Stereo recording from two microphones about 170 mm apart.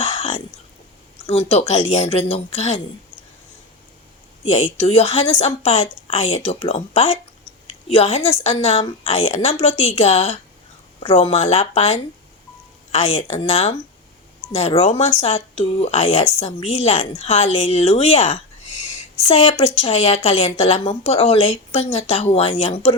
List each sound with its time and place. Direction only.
0.0 s whispering: 35° left (ahead or behind)
1.3 s a woman's voice: 35° left (ahead or behind)
4.4 s a woman's voice: 40° left (ahead or behind)